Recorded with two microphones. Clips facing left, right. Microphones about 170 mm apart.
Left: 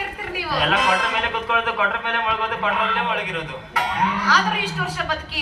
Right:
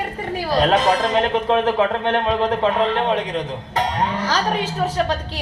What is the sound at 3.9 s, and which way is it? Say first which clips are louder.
Music: left 2 dB; 25° right (ahead or behind).